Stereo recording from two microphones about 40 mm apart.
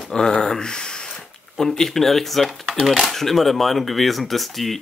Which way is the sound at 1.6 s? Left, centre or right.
Centre.